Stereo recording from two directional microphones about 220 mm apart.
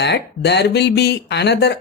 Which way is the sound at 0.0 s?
50° left (ahead or behind).